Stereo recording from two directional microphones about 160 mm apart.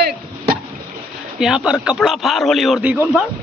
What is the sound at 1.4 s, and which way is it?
Speech, 5° right (ahead or behind).